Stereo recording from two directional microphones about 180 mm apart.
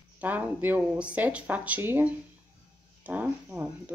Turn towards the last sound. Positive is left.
turn(degrees=-10)  # may be behind; listen again after turning